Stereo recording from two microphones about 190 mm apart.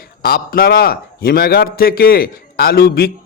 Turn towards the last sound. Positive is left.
turn(degrees=55)  # may be behind; listen again after turning